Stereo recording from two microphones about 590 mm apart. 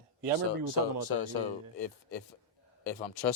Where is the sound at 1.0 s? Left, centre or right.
Left.